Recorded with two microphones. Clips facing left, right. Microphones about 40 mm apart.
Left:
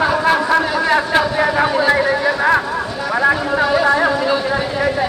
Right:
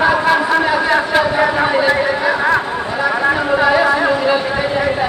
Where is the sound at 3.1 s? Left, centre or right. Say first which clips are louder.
Left 2 dB; centre.